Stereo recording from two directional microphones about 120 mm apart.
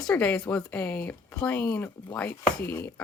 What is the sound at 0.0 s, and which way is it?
Speech, 10° left (ahead or behind).